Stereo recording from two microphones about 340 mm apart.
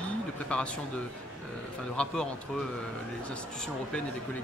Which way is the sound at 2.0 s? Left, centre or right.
Centre.